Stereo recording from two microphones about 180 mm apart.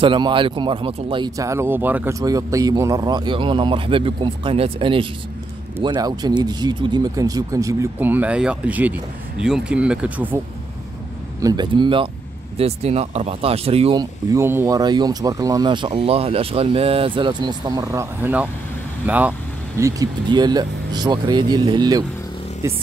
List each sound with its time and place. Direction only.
0.0 s speech: 25° right (ahead or behind); by 10.4 s 10° right (ahead or behind)
11.4 s speech: 25° right (ahead or behind)
14.3 s speech: 15° right (ahead or behind)
19.8 s speech: 20° right (ahead or behind)